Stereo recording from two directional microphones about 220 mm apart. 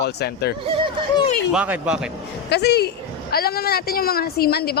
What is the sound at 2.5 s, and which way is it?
Speech, 45° left (ahead or behind).